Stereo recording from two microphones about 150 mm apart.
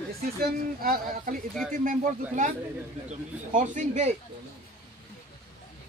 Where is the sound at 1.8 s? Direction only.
60° right (ahead or behind).